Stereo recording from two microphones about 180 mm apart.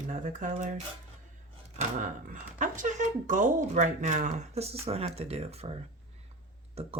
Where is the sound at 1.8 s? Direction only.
45° right (ahead or behind).